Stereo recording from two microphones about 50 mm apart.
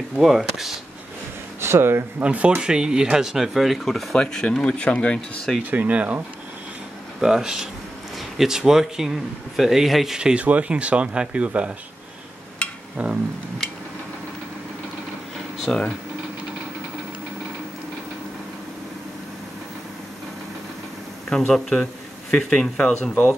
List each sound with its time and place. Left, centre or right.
0.2 s speech: centre
1.6 s speech: right
2.2 s speech: right; by 3.8 s centre
3.8 s speech: centre; by 5.4 s left
5.6 s speech: right
7.2 s speech: centre
10.1 s speech: centre
10.4 s speech: right
12.9 s speech: right
15.7 s speech: left
21.3 s speech: centre